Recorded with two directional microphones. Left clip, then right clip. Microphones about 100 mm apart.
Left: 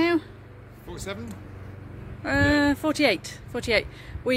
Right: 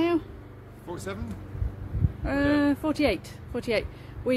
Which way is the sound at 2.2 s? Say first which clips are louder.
Left 3 dB; 15° left (ahead or behind).